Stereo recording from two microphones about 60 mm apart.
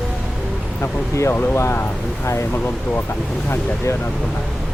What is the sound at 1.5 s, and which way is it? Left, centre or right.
Speech, left.